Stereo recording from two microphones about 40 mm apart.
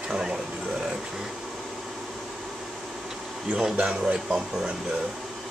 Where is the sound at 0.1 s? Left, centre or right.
Right.